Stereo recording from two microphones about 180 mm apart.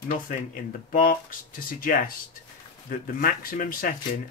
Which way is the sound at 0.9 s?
50° left (ahead or behind).